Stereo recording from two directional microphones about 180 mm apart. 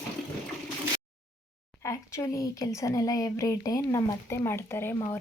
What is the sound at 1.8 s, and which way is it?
Speech, 15° left (ahead or behind).